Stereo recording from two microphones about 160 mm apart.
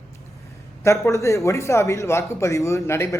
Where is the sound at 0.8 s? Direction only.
20° left (ahead or behind).